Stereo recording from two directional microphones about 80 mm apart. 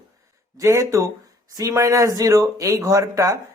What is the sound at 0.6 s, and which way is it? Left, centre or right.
Speech, right.